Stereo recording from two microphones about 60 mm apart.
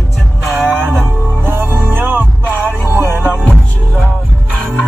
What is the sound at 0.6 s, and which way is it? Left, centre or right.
Music, right.